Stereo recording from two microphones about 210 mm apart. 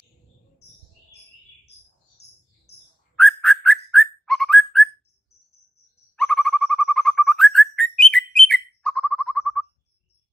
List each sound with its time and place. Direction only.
2.2 s bird: 50° left (ahead or behind)
3.2 s whistling: centre (ahead or behind)
6.1 s bird: centre (ahead or behind)